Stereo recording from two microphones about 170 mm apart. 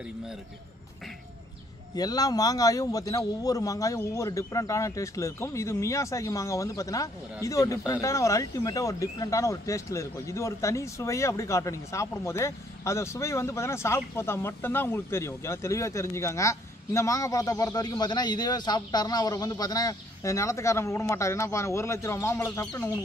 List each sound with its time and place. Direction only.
2.0 s a man's voice: 20° left (ahead or behind)